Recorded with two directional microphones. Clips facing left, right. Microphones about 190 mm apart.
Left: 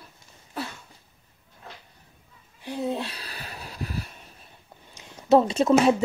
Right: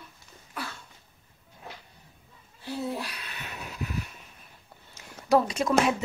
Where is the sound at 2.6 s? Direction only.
20° left (ahead or behind); by 4.1 s 35° left (ahead or behind).